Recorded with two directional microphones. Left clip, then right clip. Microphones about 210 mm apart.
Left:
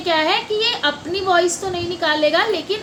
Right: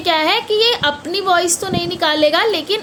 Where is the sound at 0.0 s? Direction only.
55° right (ahead or behind).